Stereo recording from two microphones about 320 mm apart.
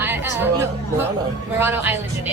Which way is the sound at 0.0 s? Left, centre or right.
Centre.